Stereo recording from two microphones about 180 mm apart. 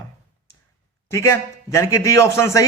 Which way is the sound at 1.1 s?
15° left (ahead or behind).